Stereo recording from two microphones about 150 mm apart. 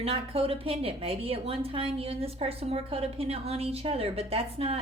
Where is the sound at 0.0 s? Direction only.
40° right (ahead or behind).